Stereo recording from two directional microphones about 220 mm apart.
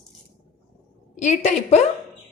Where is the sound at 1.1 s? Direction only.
35° left (ahead or behind).